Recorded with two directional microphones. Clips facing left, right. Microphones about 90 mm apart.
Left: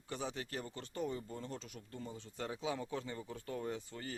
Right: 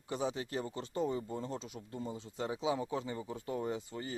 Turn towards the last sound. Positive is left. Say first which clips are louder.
# right 4 dB
turn(degrees=-15)  # may be behind; listen again after turning